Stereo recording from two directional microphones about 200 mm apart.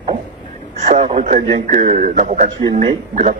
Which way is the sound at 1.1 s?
40° right (ahead or behind).